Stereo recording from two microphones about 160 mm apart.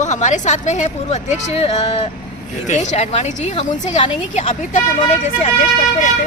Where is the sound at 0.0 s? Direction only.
50° left (ahead or behind).